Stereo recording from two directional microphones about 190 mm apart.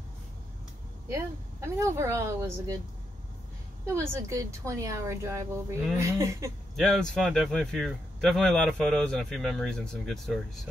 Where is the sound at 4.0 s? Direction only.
15° right (ahead or behind).